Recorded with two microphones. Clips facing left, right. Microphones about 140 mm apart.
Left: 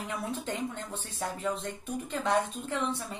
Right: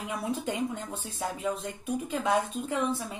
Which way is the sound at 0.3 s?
5° right (ahead or behind).